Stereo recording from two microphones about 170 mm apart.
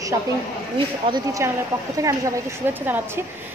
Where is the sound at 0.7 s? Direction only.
30° right (ahead or behind).